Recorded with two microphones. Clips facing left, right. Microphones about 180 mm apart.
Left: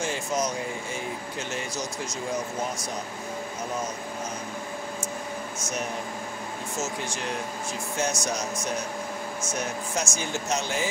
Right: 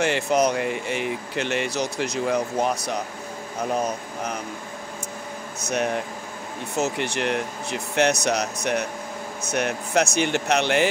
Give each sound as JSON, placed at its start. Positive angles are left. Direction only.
{"t": 0.0, "sound": "speech", "side_deg": -65}
{"t": 5.6, "sound": "speech", "side_deg": -65}